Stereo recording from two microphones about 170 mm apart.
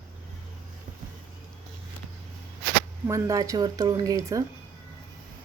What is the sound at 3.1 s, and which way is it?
Speech, 20° right (ahead or behind).